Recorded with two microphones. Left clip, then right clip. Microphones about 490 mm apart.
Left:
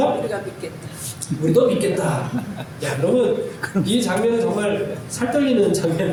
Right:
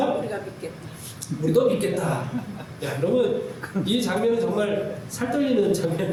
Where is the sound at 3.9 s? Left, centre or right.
Right.